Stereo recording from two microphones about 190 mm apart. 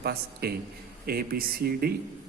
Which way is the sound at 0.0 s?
55° right (ahead or behind).